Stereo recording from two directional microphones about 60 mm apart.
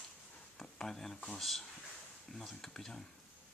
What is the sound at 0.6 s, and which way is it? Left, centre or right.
Speech, centre.